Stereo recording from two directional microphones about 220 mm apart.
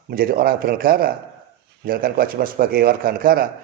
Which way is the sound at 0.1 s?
40° right (ahead or behind).